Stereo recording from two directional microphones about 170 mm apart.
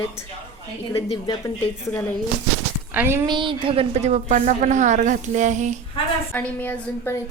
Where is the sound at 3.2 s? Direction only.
25° right (ahead or behind); by 5.8 s 45° right (ahead or behind).